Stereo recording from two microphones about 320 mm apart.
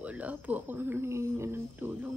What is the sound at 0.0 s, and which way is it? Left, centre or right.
Speech, centre.